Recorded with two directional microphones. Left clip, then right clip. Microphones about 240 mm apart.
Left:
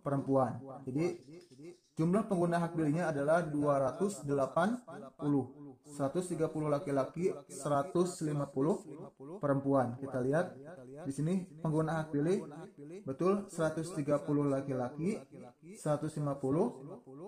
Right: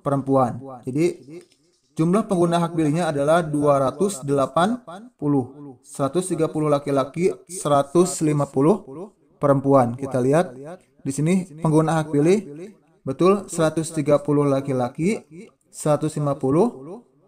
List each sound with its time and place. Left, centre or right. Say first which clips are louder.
0.0 s a man's voice: right 12 dB; right